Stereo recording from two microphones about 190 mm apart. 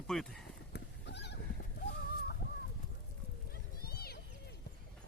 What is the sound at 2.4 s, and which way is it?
Chicken, 60° left (ahead or behind).